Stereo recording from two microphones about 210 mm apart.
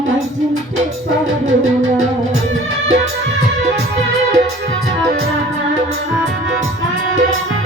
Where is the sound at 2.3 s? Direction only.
70° right (ahead or behind).